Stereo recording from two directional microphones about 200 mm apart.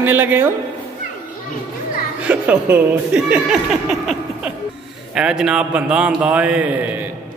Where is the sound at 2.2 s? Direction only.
5° right (ahead or behind).